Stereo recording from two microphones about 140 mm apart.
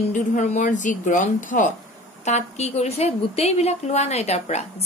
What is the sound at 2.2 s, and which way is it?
A woman's voice, 55° left (ahead or behind).